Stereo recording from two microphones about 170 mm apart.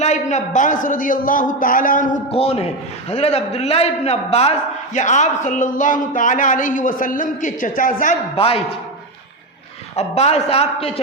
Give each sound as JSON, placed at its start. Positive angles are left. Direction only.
{"t": 0.0, "sound": "a man's voice", "side_deg": 45}
{"t": 2.3, "sound": "a man's voice", "side_deg": 35}
{"t": 8.4, "sound": "a man's voice", "side_deg": 35}
{"t": 9.9, "sound": "a man's voice", "side_deg": 40}